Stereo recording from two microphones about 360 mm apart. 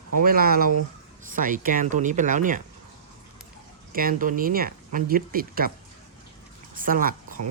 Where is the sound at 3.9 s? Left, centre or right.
Right.